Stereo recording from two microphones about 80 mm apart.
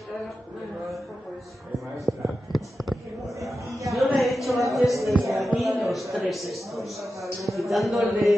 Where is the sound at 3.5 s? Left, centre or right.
Right.